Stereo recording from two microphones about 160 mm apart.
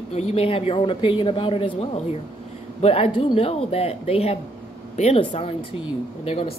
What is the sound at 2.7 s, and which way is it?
A woman's voice, 40° left (ahead or behind).